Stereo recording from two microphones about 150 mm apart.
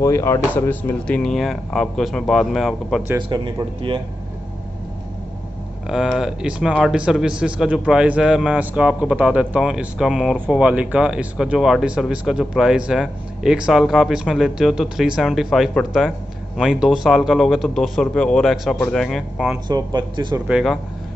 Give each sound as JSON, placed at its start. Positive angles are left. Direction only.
{"t": 0.0, "sound": "speech", "side_deg": 20}
{"t": 3.2, "sound": "a man's voice", "side_deg": -30}
{"t": 5.9, "sound": "speech", "side_deg": -5}
{"t": 19.7, "sound": "speech", "side_deg": -30}
{"t": 20.4, "sound": "speech", "side_deg": 0}